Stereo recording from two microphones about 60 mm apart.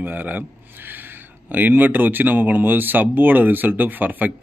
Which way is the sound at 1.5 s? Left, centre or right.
Right.